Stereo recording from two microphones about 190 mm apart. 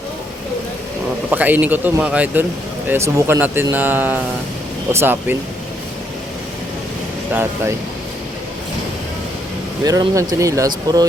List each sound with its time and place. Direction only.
1.3 s speech: 10° right (ahead or behind)
9.8 s speech: 20° right (ahead or behind)